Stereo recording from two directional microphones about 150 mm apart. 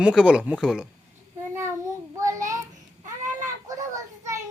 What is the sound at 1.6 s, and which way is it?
Child singing, 20° right (ahead or behind).